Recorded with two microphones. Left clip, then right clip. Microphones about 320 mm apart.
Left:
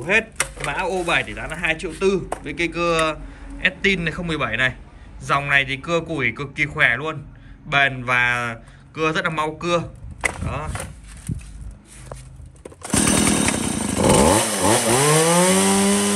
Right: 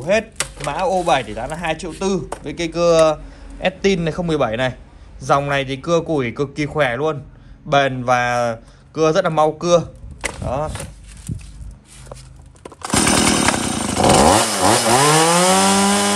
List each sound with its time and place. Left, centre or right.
0.0 s speech: centre
12.6 s chainsaw: centre